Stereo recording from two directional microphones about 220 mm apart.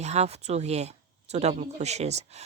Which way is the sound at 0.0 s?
30° right (ahead or behind).